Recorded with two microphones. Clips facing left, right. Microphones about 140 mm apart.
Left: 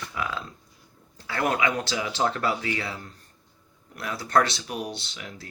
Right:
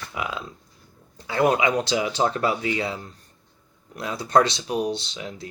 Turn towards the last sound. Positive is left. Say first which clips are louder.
# right 6 dB
turn(degrees=-20)  # may be behind; listen again after turning